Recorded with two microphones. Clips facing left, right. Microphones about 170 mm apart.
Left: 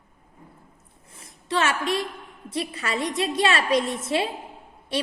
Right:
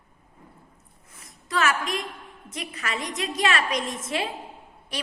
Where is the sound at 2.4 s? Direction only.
30° left (ahead or behind).